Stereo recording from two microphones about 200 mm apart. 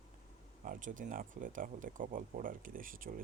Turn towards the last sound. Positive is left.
turn(degrees=-45)  # may be behind; listen again after turning